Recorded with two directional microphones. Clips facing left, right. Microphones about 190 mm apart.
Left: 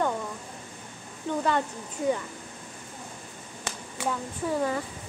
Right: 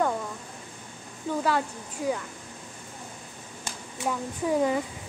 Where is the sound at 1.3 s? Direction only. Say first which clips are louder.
Even; 5° right (ahead or behind).